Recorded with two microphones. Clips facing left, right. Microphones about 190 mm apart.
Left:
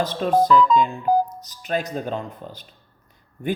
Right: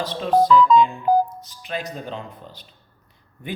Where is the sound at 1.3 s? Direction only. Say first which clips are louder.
Left 5 dB; 40° left (ahead or behind).